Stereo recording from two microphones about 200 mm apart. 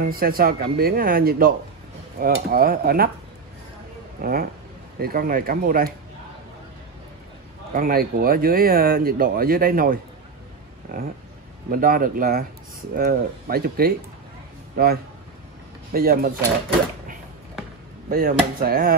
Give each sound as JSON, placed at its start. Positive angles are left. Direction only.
{"t": 0.0, "sound": "speech", "side_deg": -45}
{"t": 4.2, "sound": "speech", "side_deg": -50}
{"t": 7.7, "sound": "speech", "side_deg": -45}
{"t": 11.7, "sound": "speech", "side_deg": -45}
{"t": 18.1, "sound": "speech", "side_deg": -45}